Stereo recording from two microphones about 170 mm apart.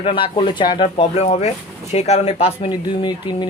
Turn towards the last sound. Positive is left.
turn(degrees=25)  # may be behind; listen again after turning